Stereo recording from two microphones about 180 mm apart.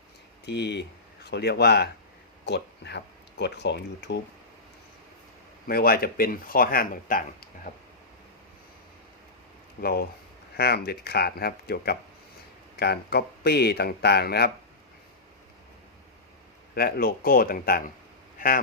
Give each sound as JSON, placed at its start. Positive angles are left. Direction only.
{"t": 0.4, "sound": "speech", "side_deg": 70}
{"t": 5.6, "sound": "speech", "side_deg": 55}
{"t": 9.8, "sound": "speech", "side_deg": 60}
{"t": 16.7, "sound": "speech", "side_deg": 55}